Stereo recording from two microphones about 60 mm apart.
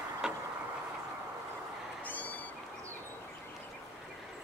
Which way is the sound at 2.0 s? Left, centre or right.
Left.